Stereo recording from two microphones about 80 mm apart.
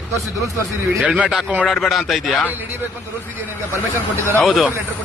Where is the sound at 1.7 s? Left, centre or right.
Centre.